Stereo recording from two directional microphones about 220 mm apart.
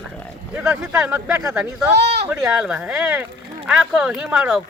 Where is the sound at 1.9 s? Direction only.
50° right (ahead or behind).